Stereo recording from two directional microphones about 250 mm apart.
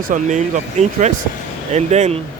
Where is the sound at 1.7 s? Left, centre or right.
Right.